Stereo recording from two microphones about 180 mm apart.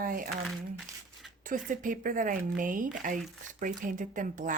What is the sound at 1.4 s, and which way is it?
Speech, 45° right (ahead or behind).